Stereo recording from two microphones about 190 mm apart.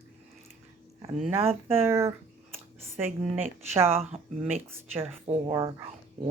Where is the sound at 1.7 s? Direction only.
15° right (ahead or behind).